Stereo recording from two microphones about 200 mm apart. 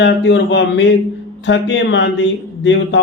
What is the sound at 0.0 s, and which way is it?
Mantra, 65° left (ahead or behind).